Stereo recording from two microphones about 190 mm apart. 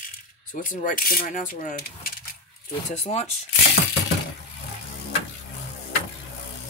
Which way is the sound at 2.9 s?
35° left (ahead or behind).